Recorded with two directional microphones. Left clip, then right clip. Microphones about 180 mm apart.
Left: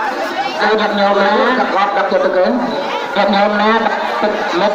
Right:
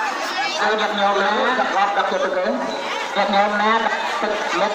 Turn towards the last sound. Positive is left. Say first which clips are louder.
# left 5 dB
turn(degrees=-30)  # may be behind; listen again after turning